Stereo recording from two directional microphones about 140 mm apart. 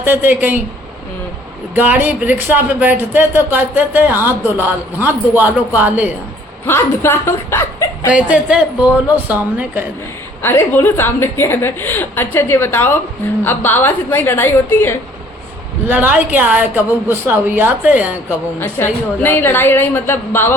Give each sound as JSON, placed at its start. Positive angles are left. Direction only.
{"t": 0.0, "sound": "speech", "side_deg": -15}
{"t": 1.7, "sound": "speech", "side_deg": -15}
{"t": 6.7, "sound": "a woman's voice", "side_deg": 15}
{"t": 8.1, "sound": "speech", "side_deg": -10}
{"t": 10.4, "sound": "a woman's voice", "side_deg": 15}
{"t": 15.9, "sound": "speech", "side_deg": -15}
{"t": 18.6, "sound": "a woman's voice", "side_deg": 15}